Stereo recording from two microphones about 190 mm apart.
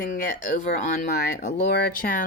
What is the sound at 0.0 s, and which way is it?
Speech, 40° left (ahead or behind).